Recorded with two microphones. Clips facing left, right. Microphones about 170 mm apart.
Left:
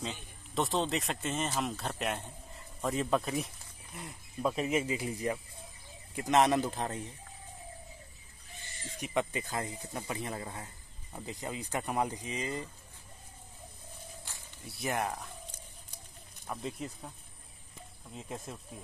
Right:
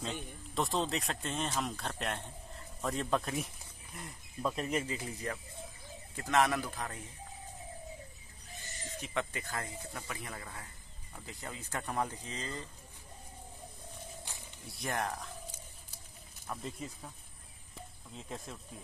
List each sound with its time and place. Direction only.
0.0 s speech: centre (ahead or behind); by 7.0 s 25° left (ahead or behind)
9.0 s speech: 15° left (ahead or behind)
14.7 s speech: 5° left (ahead or behind)
16.4 s speech: centre (ahead or behind)
18.1 s speech: 5° left (ahead or behind)